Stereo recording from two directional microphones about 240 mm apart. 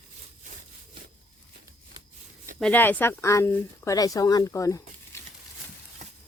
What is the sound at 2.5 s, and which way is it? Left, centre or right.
Speech, centre.